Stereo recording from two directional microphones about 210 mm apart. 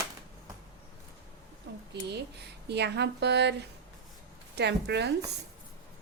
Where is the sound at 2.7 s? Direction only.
55° right (ahead or behind).